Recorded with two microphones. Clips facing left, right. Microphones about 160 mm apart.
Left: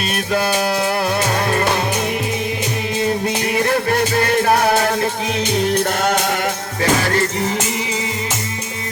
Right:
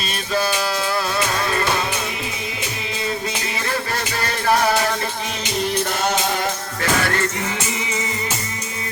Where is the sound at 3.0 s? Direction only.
50° left (ahead or behind).